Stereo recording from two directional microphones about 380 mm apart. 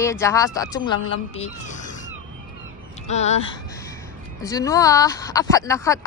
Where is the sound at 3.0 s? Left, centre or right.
Centre.